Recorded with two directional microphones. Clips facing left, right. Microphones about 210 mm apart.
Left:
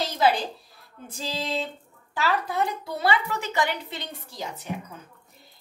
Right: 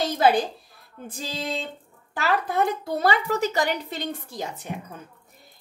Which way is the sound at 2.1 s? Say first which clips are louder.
Right 2 dB; 55° right (ahead or behind).